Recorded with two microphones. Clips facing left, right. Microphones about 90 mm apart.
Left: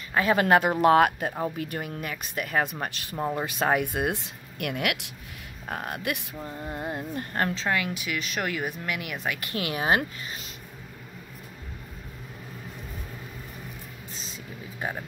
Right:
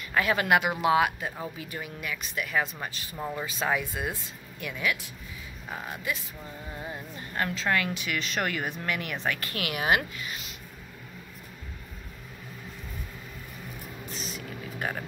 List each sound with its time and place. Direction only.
0.1 s speech: 35° left (ahead or behind); by 3.2 s 55° left (ahead or behind)
3.2 s speech: 30° left (ahead or behind)
3.4 s speech: 55° left (ahead or behind)
6.4 s speech: 50° left (ahead or behind)
7.3 s speech: 35° left (ahead or behind)
7.6 s speech: 10° left (ahead or behind)
9.4 s speech: 25° left (ahead or behind)
14.3 s a sound: 20° left (ahead or behind)